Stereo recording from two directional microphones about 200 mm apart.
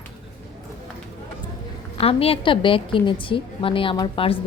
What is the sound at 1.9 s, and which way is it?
A woman's voice, 30° left (ahead or behind).